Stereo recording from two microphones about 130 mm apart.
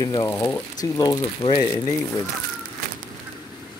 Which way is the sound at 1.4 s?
60° left (ahead or behind).